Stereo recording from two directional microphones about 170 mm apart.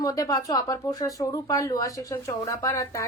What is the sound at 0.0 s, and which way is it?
Speech, 20° left (ahead or behind).